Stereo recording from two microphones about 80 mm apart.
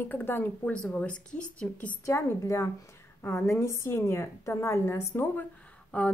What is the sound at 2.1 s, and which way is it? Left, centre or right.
A woman's voice, left.